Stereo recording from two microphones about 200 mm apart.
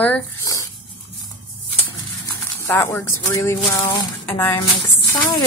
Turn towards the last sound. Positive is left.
turn(degrees=15)  # may be behind; listen again after turning